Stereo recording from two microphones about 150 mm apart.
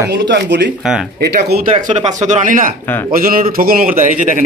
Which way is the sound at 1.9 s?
55° right (ahead or behind).